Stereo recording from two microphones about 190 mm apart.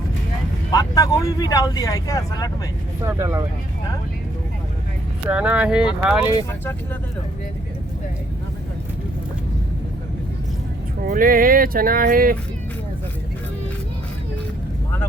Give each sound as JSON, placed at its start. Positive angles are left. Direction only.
{"t": 0.7, "sound": "speech", "side_deg": 20}
{"t": 3.0, "sound": "speech", "side_deg": -15}
{"t": 5.3, "sound": "speech", "side_deg": -5}
{"t": 11.0, "sound": "speech", "side_deg": -50}